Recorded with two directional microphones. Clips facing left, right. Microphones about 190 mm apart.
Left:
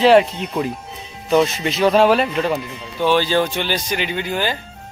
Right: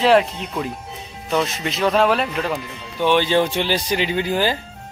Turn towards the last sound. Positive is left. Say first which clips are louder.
# right 2 dB
turn(degrees=-30)  # may be behind; listen again after turning